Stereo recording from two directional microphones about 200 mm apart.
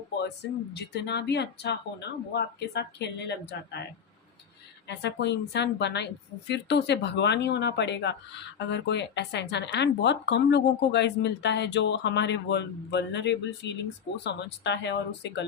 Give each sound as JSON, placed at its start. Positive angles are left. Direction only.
{"t": 0.7, "sound": "speech", "side_deg": 55}
{"t": 4.9, "sound": "speech", "side_deg": 60}